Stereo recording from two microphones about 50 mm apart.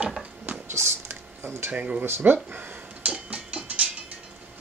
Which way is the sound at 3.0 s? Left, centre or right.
Right.